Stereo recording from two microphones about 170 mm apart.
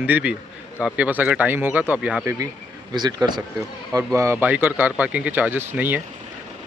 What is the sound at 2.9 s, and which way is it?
A man's voice, 25° right (ahead or behind).